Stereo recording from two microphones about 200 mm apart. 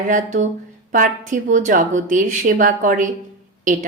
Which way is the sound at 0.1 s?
40° right (ahead or behind).